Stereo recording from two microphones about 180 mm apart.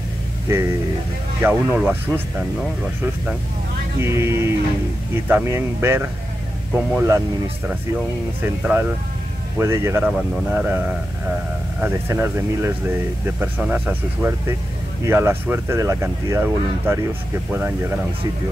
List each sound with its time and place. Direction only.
0.5 s speech: 15° right (ahead or behind)
4.0 s speech: 15° right (ahead or behind)
7.1 s speech: 15° right (ahead or behind)
10.0 s speech: 5° right (ahead or behind)